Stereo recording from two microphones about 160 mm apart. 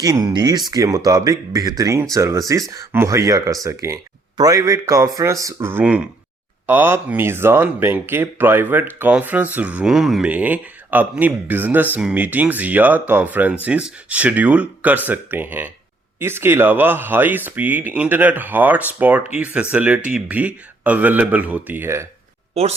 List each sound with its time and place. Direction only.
0.0 s speech: 20° right (ahead or behind)
22.5 s speech: 40° right (ahead or behind)